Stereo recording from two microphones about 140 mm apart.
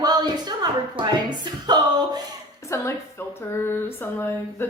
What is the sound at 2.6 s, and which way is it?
Speech, 20° left (ahead or behind).